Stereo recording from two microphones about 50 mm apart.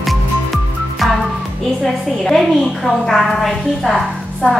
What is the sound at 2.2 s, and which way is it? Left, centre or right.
A woman's voice, centre.